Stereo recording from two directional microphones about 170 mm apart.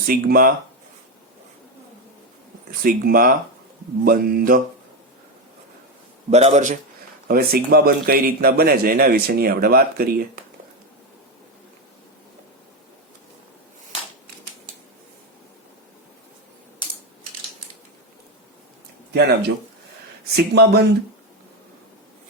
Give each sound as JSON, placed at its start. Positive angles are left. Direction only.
{"t": 0.1, "sound": "a man's voice", "side_deg": -60}
{"t": 2.8, "sound": "a man's voice", "side_deg": -60}
{"t": 6.3, "sound": "a man's voice", "side_deg": -40}
{"t": 7.3, "sound": "a man's voice", "side_deg": -65}
{"t": 19.1, "sound": "speech", "side_deg": -80}
{"t": 20.3, "sound": "speech", "side_deg": -70}